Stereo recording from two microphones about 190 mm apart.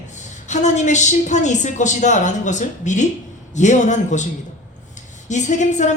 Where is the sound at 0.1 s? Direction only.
40° left (ahead or behind).